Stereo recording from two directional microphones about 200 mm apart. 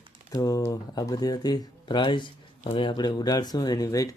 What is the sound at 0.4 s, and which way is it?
Speech, 15° left (ahead or behind).